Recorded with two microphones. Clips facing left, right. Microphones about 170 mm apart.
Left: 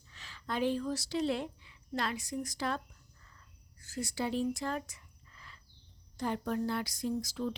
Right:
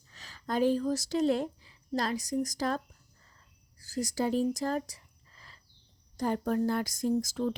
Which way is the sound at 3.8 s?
35° right (ahead or behind).